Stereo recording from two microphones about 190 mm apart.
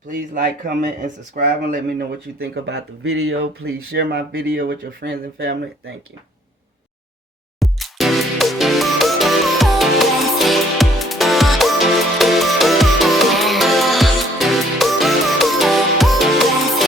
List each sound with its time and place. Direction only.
0.8 s speech: 45° right (ahead or behind)
7.6 s music: centre (ahead or behind)